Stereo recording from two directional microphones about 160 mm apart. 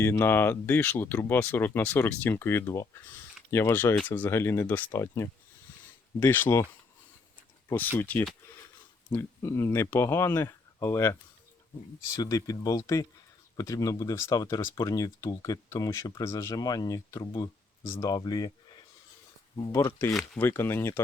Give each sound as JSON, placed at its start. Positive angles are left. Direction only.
{"t": 0.0, "sound": "speech", "side_deg": 15}
{"t": 7.9, "sound": "speech", "side_deg": 10}
{"t": 20.1, "sound": "speech", "side_deg": 5}
{"t": 20.5, "sound": "speech", "side_deg": 15}